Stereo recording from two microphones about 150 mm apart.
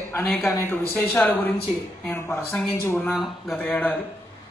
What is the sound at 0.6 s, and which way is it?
Speech, 15° left (ahead or behind).